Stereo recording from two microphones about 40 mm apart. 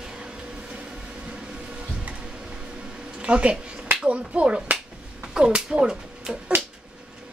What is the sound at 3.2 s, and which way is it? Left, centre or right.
Speech, right.